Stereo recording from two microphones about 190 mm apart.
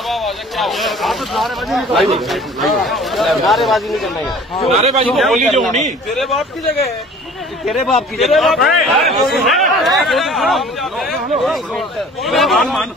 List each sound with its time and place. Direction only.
0.1 s speech: centre (ahead or behind)
4.7 s a man's voice: 35° right (ahead or behind)
5.1 s speech: centre (ahead or behind)
5.7 s a man's voice: 40° right (ahead or behind)
6.1 s speech: centre (ahead or behind)
7.6 s speech: centre (ahead or behind)